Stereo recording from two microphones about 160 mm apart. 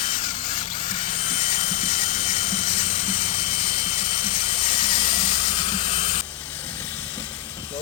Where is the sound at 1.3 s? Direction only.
55° left (ahead or behind).